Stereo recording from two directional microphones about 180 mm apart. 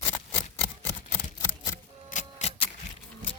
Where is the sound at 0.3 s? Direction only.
10° left (ahead or behind).